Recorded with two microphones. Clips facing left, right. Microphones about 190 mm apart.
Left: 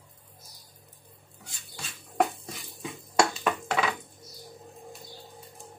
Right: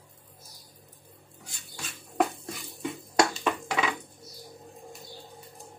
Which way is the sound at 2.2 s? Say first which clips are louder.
Even; centre (ahead or behind).